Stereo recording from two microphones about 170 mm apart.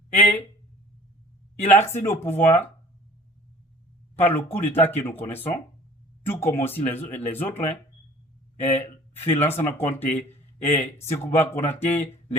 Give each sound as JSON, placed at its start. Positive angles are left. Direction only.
{"t": 0.2, "sound": "speech", "side_deg": 10}
{"t": 1.6, "sound": "speech", "side_deg": 15}
{"t": 4.2, "sound": "speech", "side_deg": 10}
{"t": 8.8, "sound": "speech", "side_deg": 10}